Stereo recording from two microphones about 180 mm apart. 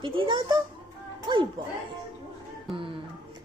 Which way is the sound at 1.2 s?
25° right (ahead or behind).